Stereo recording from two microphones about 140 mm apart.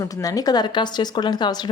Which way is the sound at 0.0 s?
25° left (ahead or behind).